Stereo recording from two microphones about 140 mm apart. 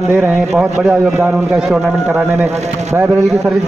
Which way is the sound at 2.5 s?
50° right (ahead or behind).